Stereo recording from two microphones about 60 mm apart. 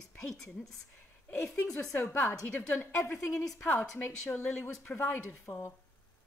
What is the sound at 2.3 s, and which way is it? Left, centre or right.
A woman's voice, left.